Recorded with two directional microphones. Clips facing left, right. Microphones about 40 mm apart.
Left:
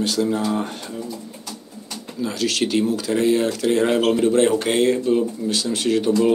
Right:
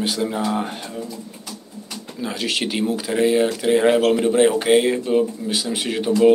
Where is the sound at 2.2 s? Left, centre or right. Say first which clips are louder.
Left 2 dB; centre.